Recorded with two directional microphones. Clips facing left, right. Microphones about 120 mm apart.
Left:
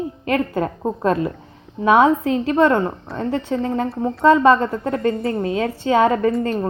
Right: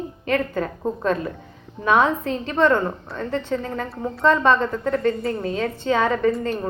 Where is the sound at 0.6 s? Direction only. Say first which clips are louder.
Left 3 dB; 30° left (ahead or behind).